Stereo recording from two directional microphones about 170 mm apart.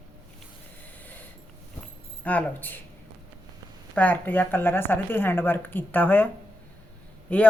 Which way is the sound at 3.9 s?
10° left (ahead or behind).